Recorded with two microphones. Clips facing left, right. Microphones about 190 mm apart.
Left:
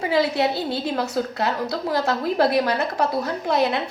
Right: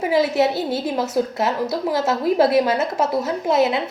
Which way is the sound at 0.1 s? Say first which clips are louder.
Right 3 dB; 20° right (ahead or behind).